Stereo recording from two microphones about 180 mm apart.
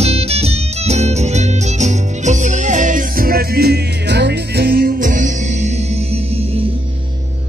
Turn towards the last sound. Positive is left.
turn(degrees=-45)  # may be behind; listen again after turning